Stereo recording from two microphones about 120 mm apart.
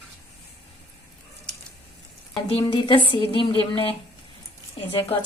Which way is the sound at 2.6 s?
45° left (ahead or behind).